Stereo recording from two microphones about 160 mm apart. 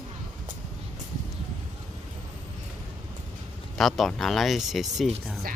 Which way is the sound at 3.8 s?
Centre (ahead or behind).